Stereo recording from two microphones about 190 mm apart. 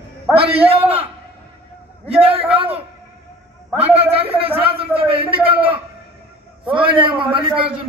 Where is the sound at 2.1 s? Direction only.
30° right (ahead or behind).